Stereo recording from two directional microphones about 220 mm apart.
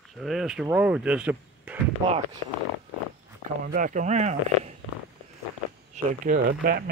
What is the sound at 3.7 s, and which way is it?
Speech, 35° right (ahead or behind).